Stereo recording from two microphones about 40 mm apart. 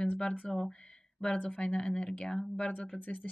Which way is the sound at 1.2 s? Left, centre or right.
Left.